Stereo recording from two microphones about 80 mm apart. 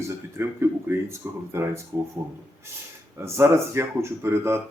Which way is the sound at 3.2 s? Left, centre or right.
Right.